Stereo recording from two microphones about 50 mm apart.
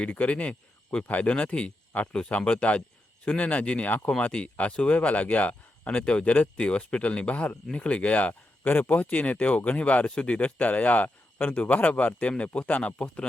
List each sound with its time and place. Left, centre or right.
0.0 s speech: left